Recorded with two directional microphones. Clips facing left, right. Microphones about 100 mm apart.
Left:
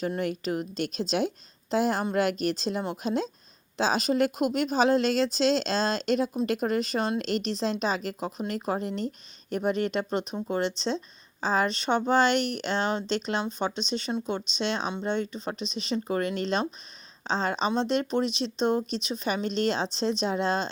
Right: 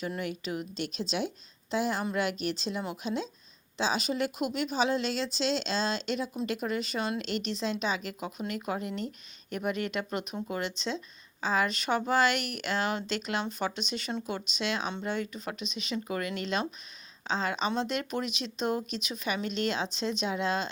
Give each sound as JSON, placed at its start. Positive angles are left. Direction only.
{"t": 0.2, "sound": "speech", "side_deg": 45}